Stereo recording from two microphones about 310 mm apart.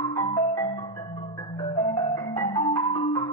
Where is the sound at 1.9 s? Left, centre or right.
Centre.